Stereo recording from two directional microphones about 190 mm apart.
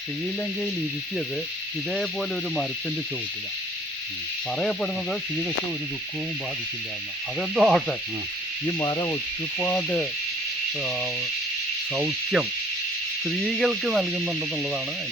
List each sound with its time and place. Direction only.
4.5 s speech: 5° left (ahead or behind)
7.3 s speech: centre (ahead or behind)
8.6 s speech: 20° left (ahead or behind)
9.6 s insect: 5° left (ahead or behind)
11.9 s speech: 5° right (ahead or behind)